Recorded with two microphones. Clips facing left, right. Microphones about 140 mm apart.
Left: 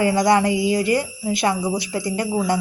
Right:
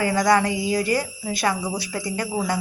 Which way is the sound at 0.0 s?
25° left (ahead or behind).